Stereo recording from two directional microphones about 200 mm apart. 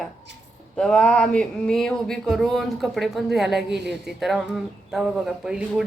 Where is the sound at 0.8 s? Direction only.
5° left (ahead or behind).